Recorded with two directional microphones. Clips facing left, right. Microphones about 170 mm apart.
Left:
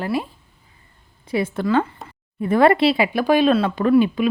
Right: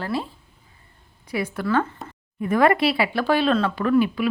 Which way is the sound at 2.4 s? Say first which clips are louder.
Left 3 dB; 30° left (ahead or behind).